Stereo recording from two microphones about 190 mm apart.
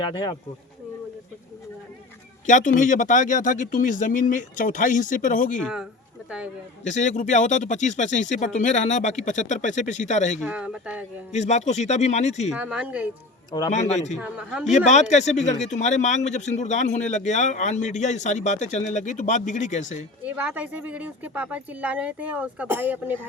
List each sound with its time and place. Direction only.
2.5 s speech: 40° left (ahead or behind)
5.5 s speech: centre (ahead or behind)
6.8 s speech: 40° left (ahead or behind)
10.4 s speech: 5° right (ahead or behind)
11.3 s speech: 35° left (ahead or behind)
12.5 s speech: 5° right (ahead or behind)
13.7 s speech: 35° left (ahead or behind)
14.2 s speech: 5° right (ahead or behind)
14.8 s speech: 35° left (ahead or behind)
20.2 s speech: 10° right (ahead or behind)